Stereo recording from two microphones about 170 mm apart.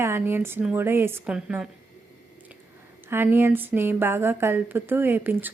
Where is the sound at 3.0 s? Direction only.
10° right (ahead or behind).